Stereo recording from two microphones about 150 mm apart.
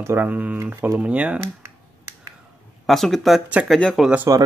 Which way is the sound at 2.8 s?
Centre (ahead or behind).